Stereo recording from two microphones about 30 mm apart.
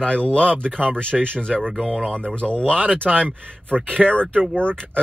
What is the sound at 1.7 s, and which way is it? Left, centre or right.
Speech, centre.